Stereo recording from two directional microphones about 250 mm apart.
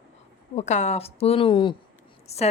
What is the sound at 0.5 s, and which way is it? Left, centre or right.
A woman's voice, left.